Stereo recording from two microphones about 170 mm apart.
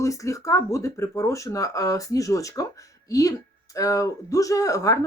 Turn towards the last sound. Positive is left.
turn(degrees=20)  # may be behind; listen again after turning